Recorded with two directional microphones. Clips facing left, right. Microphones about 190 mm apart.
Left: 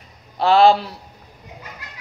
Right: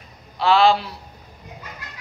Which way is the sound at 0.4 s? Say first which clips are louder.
Left 3 dB; 45° left (ahead or behind).